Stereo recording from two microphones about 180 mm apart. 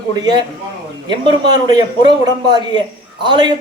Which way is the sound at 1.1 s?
25° right (ahead or behind).